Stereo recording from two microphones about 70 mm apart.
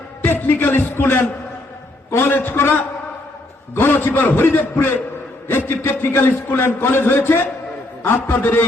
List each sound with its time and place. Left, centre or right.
0.3 s a man's voice: left